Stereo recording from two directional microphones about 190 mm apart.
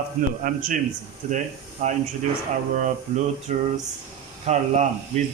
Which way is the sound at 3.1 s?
40° right (ahead or behind).